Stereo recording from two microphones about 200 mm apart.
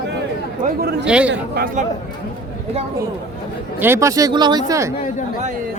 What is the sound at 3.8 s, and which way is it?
Speech, 15° right (ahead or behind).